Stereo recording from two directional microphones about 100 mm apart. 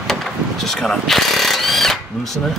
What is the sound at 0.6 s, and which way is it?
Mechanisms, 5° left (ahead or behind).